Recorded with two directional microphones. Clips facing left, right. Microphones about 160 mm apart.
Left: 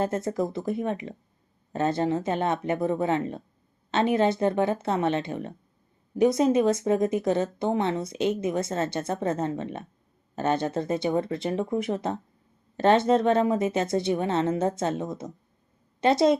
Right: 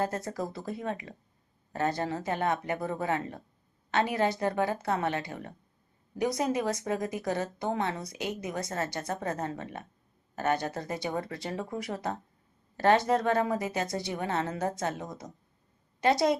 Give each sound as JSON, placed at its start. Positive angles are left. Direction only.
{"t": 0.0, "sound": "a woman's voice", "side_deg": 25}